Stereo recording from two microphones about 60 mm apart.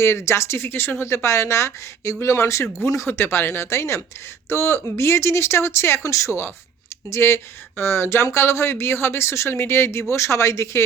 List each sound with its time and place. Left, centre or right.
0.0 s speech: left
2.6 s speech: centre
3.1 s speech: left